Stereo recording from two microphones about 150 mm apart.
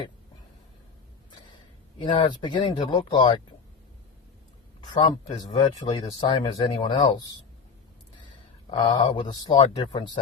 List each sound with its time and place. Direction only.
2.0 s speech: 30° left (ahead or behind)
4.8 s speech: 30° left (ahead or behind)
8.7 s speech: 30° left (ahead or behind)